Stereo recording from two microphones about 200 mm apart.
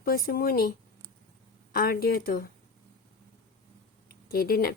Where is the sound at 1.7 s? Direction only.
45° left (ahead or behind).